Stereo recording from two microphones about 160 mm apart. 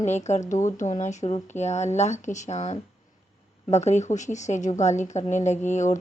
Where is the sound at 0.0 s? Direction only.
45° left (ahead or behind).